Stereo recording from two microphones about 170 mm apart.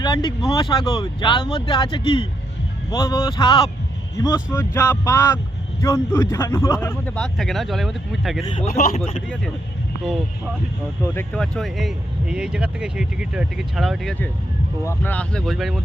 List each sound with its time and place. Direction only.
0.0 s speech: 25° left (ahead or behind)
4.4 s speech: 15° left (ahead or behind)
7.2 s speech: centre (ahead or behind)
8.8 s speech: 40° left (ahead or behind)
11.0 s speech: 10° left (ahead or behind)